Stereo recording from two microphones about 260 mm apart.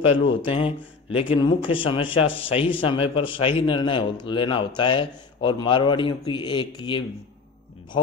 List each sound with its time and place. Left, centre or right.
0.0 s speech: left